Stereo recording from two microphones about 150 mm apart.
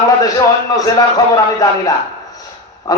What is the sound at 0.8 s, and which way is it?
A man's voice, 25° left (ahead or behind).